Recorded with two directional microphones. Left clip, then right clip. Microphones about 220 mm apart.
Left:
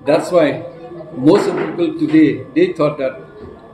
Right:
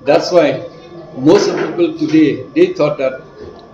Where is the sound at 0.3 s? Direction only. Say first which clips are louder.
Right 1 dB; centre (ahead or behind).